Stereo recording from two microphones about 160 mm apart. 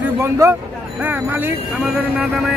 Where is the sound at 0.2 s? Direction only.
15° right (ahead or behind).